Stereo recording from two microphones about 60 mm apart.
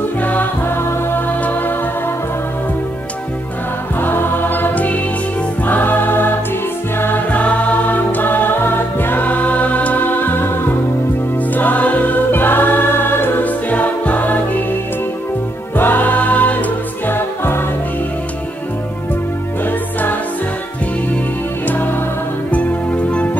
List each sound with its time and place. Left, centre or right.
0.2 s music: left
0.7 s music: left
1.4 s music: left
4.0 s music: left
19.6 s music: left
21.6 s music: left